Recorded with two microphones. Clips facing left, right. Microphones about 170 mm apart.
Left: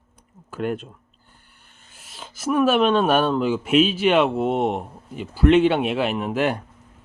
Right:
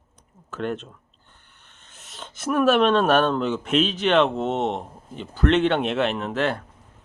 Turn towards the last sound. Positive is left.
turn(degrees=15)  # may be behind; listen again after turning